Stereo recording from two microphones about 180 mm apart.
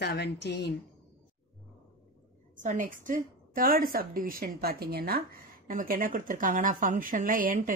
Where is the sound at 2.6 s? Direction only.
45° right (ahead or behind).